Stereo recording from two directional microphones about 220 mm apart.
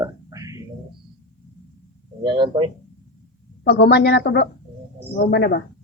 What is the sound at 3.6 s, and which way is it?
Speech, 50° left (ahead or behind).